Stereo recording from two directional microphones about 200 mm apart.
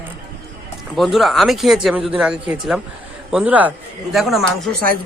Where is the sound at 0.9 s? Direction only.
Centre (ahead or behind).